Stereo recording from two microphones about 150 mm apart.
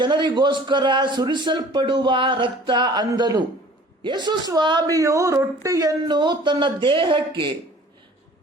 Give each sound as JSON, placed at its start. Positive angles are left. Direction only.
{"t": 0.0, "sound": "speech", "side_deg": -30}